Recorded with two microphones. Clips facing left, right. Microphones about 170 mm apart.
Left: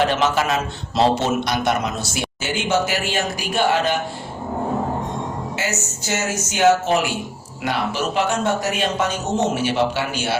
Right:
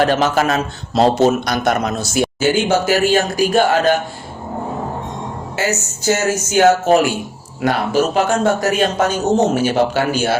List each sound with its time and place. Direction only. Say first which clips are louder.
0.0 s a man's voice: right 4 dB; 40° right (ahead or behind)
5.5 s a man's voice: right 5 dB; 40° right (ahead or behind)